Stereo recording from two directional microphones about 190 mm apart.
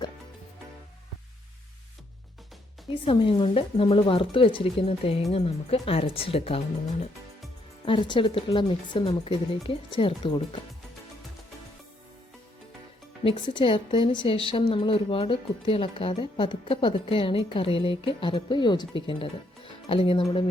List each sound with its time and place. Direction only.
2.9 s a woman's voice: 30° left (ahead or behind)
7.9 s a woman's voice: 25° left (ahead or behind)
13.2 s a woman's voice: 25° left (ahead or behind)